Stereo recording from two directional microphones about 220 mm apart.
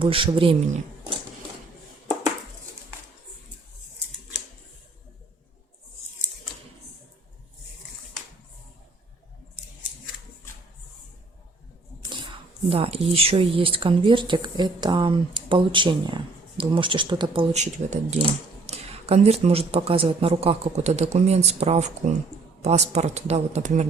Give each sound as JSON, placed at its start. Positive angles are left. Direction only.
{"t": 0.0, "sound": "speech", "side_deg": -25}
{"t": 12.7, "sound": "speech", "side_deg": -25}